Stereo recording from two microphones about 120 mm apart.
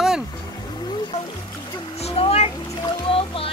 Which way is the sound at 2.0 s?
55° left (ahead or behind).